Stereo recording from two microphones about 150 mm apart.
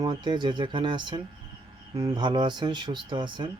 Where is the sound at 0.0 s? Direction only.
30° right (ahead or behind).